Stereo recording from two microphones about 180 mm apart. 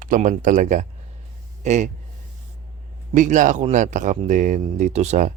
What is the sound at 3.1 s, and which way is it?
A man's voice, 45° right (ahead or behind).